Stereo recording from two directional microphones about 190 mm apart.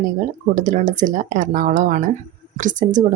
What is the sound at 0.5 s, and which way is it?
Speech, 40° right (ahead or behind).